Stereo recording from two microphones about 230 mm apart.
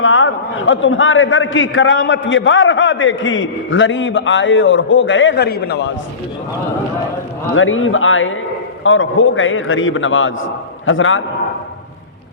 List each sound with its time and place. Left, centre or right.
0.0 s a man's voice: left
7.5 s a man's voice: left